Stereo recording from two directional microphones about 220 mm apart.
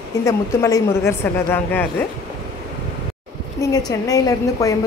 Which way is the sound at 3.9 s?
15° left (ahead or behind).